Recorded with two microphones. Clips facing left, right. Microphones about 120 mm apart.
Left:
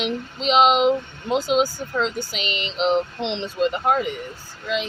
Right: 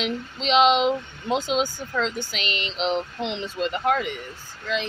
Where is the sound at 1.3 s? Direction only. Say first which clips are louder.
Left 3 dB; 10° left (ahead or behind).